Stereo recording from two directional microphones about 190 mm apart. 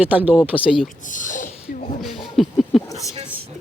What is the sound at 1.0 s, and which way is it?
Snort, 45° left (ahead or behind).